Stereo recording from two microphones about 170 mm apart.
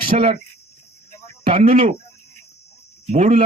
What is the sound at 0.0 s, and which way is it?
Speech, 60° right (ahead or behind).